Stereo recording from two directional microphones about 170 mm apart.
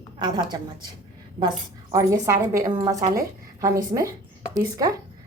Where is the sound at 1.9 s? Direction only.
20° right (ahead or behind).